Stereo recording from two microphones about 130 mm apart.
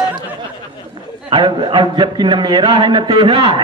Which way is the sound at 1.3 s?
40° right (ahead or behind).